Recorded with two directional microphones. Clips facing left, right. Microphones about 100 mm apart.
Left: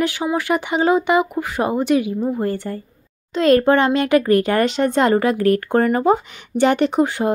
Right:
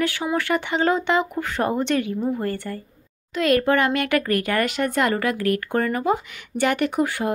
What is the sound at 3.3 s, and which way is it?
A child's voice, 30° left (ahead or behind).